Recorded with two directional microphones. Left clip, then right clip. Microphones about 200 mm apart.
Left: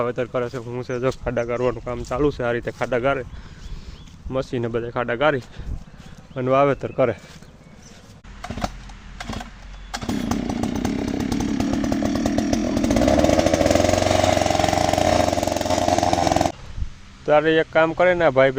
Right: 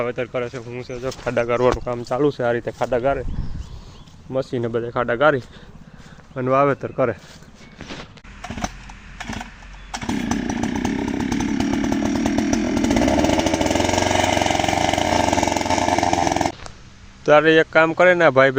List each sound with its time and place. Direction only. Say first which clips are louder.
0.0 s speech: even; 10° left (ahead or behind)
0.8 s speech: left 5 dB; 45° left (ahead or behind)
1.2 s speech: right 3 dB; 5° left (ahead or behind)
1.5 s speech: right 5 dB; 10° right (ahead or behind); by 3.2 s 10° left (ahead or behind)
4.3 s speech: right 2 dB; 5° right (ahead or behind)
10.1 s chainsaw: right 2 dB; 10° left (ahead or behind)
16.0 s dog: even; 20° left (ahead or behind)
17.2 s speech: right 4 dB; 20° right (ahead or behind)